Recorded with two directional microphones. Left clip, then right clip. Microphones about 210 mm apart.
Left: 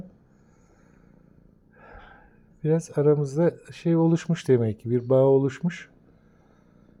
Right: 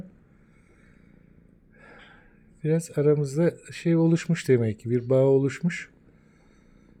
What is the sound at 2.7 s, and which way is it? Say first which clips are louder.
Speech: left 1 dB; 5° right (ahead or behind).